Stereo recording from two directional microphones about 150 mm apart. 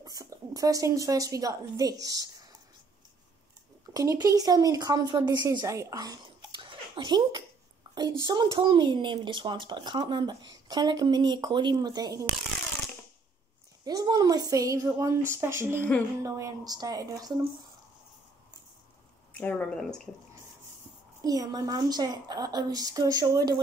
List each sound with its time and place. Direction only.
0.0 s a woman's voice: 25° right (ahead or behind)
3.9 s a woman's voice: 25° right (ahead or behind)
7.8 s a sound: 30° right (ahead or behind)
8.3 s speech: 30° right (ahead or behind)
13.8 s a woman's voice: 25° right (ahead or behind)
19.3 s speech: 10° left (ahead or behind)
21.2 s a woman's voice: 25° right (ahead or behind)